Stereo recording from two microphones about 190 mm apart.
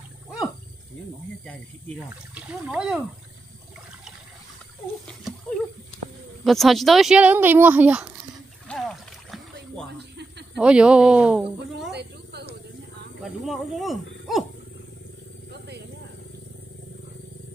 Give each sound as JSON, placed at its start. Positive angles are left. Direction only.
{"t": 2.3, "sound": "speech", "side_deg": -5}
{"t": 6.4, "sound": "speech", "side_deg": 0}
{"t": 8.6, "sound": "splash", "side_deg": 0}
{"t": 10.5, "sound": "speech", "side_deg": -5}
{"t": 11.9, "sound": "a sound", "side_deg": -60}
{"t": 13.2, "sound": "speech", "side_deg": 0}